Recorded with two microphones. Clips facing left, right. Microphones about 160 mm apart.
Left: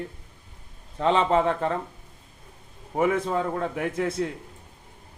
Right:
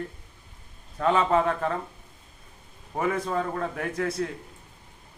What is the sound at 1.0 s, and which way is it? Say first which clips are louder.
Speech: left 1 dB; 25° left (ahead or behind).